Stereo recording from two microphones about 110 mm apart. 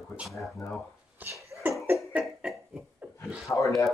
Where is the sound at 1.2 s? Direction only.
15° right (ahead or behind).